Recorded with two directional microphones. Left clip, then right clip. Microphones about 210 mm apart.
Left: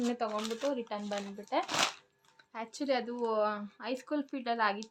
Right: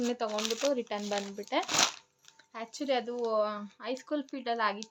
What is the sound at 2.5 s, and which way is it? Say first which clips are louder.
Speech: right 1 dB; centre (ahead or behind).